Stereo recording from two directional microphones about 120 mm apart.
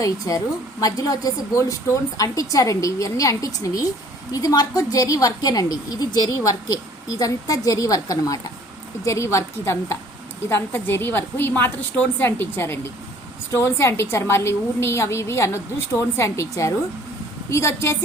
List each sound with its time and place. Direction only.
0.0 s a woman's voice: 30° left (ahead or behind)